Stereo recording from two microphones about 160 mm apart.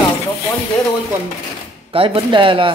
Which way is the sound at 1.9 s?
35° right (ahead or behind).